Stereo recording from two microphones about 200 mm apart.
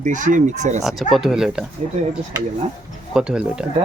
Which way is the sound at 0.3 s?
40° right (ahead or behind).